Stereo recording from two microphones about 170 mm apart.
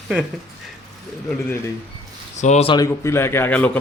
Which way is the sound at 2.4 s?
40° left (ahead or behind).